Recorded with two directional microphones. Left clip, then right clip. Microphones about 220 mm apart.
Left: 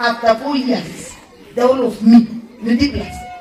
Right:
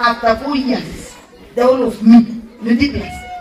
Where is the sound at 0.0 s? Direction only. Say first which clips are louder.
Right 1 dB; 55° left (ahead or behind).